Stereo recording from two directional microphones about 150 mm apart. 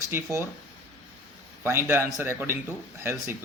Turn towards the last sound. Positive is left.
turn(degrees=-15)  # may be behind; listen again after turning